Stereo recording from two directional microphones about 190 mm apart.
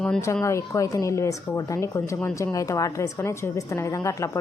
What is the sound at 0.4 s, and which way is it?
Speech, 15° left (ahead or behind).